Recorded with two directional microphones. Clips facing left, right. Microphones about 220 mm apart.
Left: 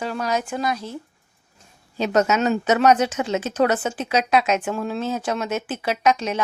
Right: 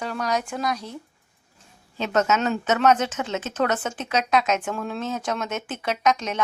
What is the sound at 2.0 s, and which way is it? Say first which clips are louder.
Speech: left 3 dB; 15° left (ahead or behind).